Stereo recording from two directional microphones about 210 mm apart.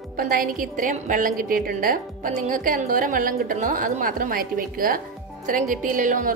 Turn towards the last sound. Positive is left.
turn(degrees=-40)  # may be behind; listen again after turning